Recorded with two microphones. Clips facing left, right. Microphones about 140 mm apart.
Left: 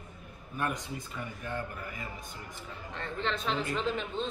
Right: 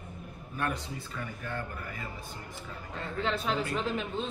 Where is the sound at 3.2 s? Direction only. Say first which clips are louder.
Right 1 dB; 5° right (ahead or behind).